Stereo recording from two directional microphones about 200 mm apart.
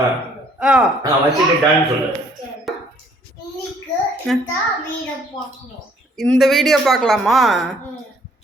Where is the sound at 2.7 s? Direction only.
Centre (ahead or behind).